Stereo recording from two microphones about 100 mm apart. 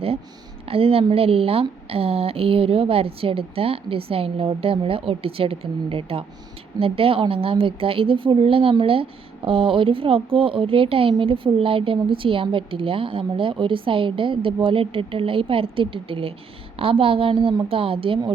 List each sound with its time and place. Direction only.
0.6 s speech: 70° right (ahead or behind)